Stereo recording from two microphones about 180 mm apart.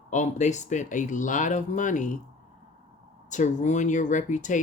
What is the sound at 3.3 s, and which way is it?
Speech, 40° left (ahead or behind).